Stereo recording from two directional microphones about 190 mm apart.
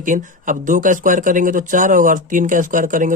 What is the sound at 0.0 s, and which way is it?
Speech, 45° right (ahead or behind).